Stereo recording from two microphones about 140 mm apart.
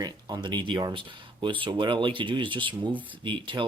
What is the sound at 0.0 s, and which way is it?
Speech, 30° right (ahead or behind).